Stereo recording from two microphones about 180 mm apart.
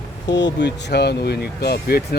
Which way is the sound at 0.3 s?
75° left (ahead or behind).